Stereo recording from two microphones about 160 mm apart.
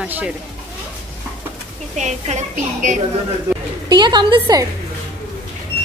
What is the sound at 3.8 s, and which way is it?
Speech, 25° right (ahead or behind).